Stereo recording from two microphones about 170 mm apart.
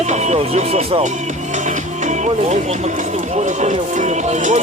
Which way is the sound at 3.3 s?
45° right (ahead or behind).